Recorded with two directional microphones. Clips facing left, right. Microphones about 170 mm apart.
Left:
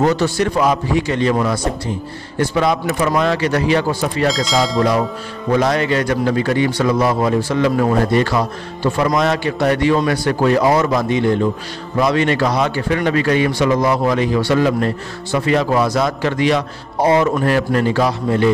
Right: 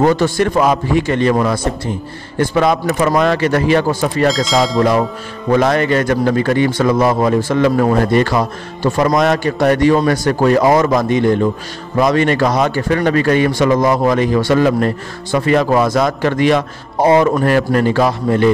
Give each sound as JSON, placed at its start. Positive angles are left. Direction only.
{"t": 0.0, "sound": "a man's voice", "side_deg": -50}
{"t": 4.3, "sound": "speech", "side_deg": 0}
{"t": 5.6, "sound": "a man's voice", "side_deg": -50}